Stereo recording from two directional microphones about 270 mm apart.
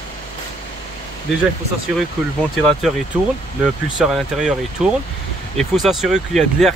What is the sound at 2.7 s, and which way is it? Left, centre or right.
Speech, centre.